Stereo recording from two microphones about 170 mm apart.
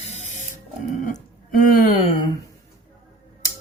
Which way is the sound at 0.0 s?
40° left (ahead or behind).